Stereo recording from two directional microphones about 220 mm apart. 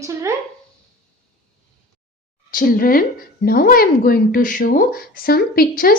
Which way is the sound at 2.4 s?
40° left (ahead or behind).